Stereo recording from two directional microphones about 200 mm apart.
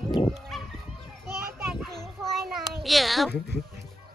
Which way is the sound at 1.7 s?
Centre (ahead or behind).